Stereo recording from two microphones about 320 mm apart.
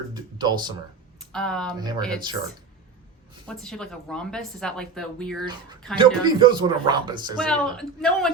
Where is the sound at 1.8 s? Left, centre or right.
Centre.